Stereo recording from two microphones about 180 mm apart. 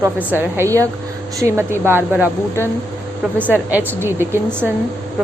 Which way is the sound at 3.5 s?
10° right (ahead or behind).